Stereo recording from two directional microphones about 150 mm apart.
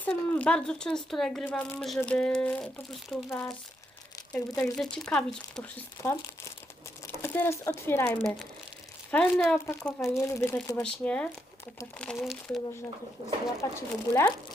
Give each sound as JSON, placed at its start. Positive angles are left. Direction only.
{"t": 0.0, "sound": "speech", "side_deg": 10}
{"t": 4.6, "sound": "speech", "side_deg": 5}
{"t": 6.0, "sound": "speech", "side_deg": 20}
{"t": 10.2, "sound": "speech", "side_deg": 20}
{"t": 13.6, "sound": "speech", "side_deg": 25}